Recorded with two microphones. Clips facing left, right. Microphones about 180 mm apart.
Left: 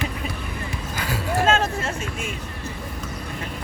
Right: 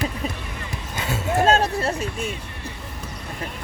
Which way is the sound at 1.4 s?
35° right (ahead or behind).